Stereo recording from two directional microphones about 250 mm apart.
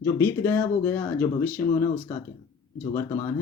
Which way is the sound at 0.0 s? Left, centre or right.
Centre.